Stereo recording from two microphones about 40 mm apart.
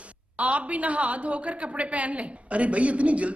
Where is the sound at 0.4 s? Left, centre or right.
Right.